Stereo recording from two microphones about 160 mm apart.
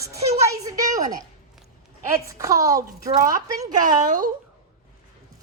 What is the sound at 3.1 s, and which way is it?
A woman's voice, 55° right (ahead or behind).